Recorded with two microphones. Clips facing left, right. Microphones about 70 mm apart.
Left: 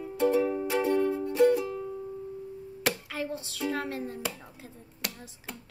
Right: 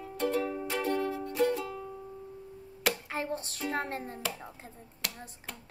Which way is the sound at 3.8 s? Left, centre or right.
Right.